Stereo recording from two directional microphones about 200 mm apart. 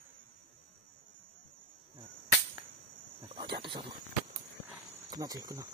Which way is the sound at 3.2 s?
25° right (ahead or behind).